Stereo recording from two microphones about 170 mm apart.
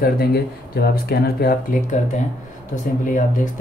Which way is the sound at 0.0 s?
65° left (ahead or behind).